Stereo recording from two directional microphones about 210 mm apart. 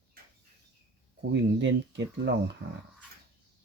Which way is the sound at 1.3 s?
55° right (ahead or behind).